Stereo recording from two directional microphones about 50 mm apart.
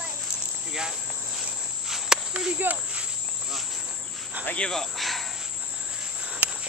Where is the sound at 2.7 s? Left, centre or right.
Right.